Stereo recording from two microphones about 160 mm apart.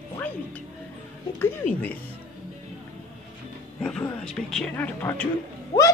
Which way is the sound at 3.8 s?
5° left (ahead or behind).